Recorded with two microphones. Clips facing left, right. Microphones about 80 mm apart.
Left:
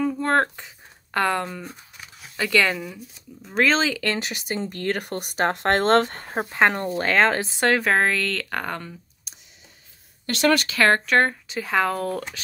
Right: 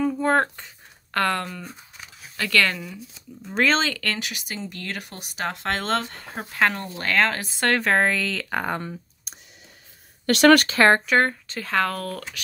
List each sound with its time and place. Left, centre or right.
0.0 s a sound: centre
1.1 s speech: centre
3.4 s speech: centre
4.2 s speech: left
6.3 s speech: left
7.7 s speech: centre
10.2 s speech: right
10.7 s speech: right
11.1 s speech: centre
11.4 s speech: centre